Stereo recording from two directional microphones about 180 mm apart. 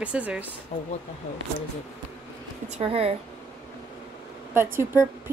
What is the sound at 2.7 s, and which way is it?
Speech, 35° right (ahead or behind).